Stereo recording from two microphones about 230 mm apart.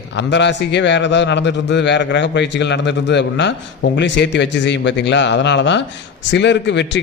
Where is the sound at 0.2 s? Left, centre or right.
Left.